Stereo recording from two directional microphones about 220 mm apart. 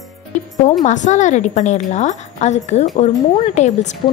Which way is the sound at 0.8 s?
35° left (ahead or behind).